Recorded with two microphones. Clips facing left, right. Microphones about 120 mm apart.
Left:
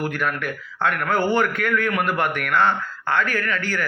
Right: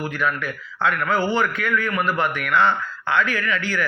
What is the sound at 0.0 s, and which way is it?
A man's voice, 50° left (ahead or behind).